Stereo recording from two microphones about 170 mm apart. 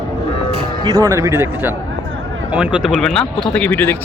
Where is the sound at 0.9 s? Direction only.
20° right (ahead or behind); by 3.9 s 10° left (ahead or behind).